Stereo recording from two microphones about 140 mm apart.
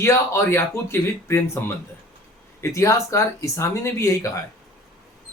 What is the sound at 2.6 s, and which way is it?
Speech, 20° left (ahead or behind).